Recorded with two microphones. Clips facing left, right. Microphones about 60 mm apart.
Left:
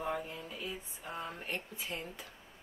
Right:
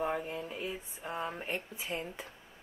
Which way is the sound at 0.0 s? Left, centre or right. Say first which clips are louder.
Right 4 dB; right.